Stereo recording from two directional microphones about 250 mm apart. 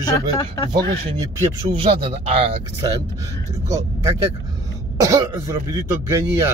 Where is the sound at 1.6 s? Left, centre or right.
Centre.